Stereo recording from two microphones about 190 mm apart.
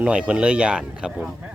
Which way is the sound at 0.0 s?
5° right (ahead or behind).